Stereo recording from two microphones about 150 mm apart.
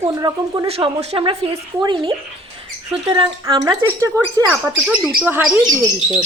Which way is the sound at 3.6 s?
15° right (ahead or behind).